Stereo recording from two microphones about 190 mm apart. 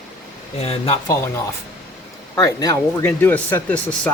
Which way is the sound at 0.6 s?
30° left (ahead or behind).